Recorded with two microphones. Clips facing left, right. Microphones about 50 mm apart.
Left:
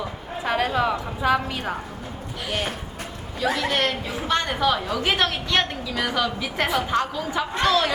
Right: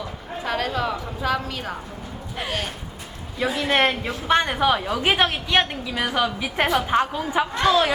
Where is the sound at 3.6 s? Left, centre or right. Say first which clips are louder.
Right 7 dB; right.